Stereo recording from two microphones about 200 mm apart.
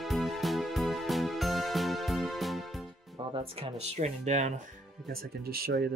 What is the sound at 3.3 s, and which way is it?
Speech, 25° right (ahead or behind).